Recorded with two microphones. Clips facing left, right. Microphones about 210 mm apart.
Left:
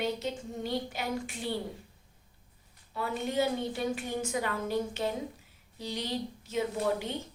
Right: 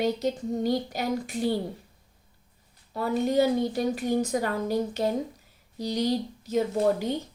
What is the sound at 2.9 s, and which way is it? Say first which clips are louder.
Speech: right 7 dB; 40° right (ahead or behind).